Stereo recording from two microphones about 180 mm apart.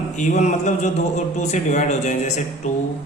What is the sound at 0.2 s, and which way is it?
A man's voice, 40° left (ahead or behind).